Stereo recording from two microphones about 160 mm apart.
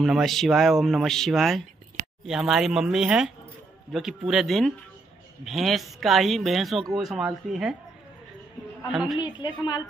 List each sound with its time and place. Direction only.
0.0 s speech: centre (ahead or behind)
8.8 s speech: centre (ahead or behind)
9.2 s a woman's voice: 30° left (ahead or behind)